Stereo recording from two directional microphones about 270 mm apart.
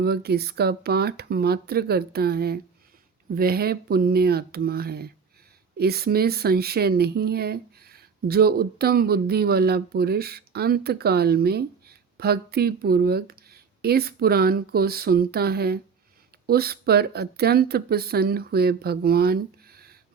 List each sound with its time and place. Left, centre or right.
0.0 s speech: right